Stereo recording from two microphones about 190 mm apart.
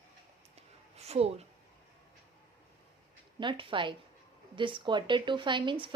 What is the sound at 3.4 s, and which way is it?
Speech, 25° right (ahead or behind).